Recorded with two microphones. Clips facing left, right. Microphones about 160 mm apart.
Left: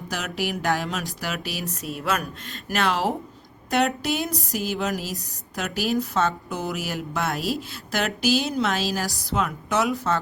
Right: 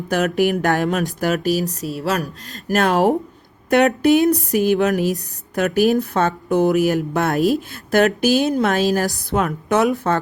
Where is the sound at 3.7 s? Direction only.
60° right (ahead or behind).